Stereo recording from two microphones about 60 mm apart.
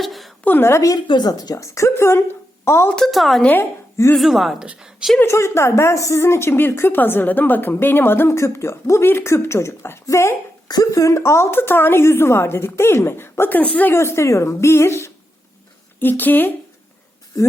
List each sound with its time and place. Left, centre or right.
0.0 s a sound: centre
0.8 s speech: left
1.5 s a woman's voice: left
3.1 s a woman's voice: centre
4.6 s a woman's voice: centre
5.2 s a woman's voice: left
6.2 s a woman's voice: left
8.3 s a woman's voice: left
10.7 s a woman's voice: left
11.2 s a woman's voice: left
13.6 s speech: left
13.9 s a woman's voice: left
16.0 s a woman's voice: left